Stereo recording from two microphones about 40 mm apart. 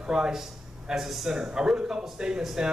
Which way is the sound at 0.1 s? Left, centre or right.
Centre.